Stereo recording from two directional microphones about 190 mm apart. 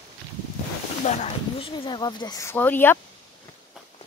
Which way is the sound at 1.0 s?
35° left (ahead or behind).